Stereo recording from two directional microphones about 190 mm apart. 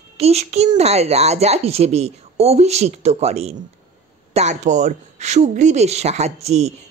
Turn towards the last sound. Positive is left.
turn(degrees=-35)  # may be behind; listen again after turning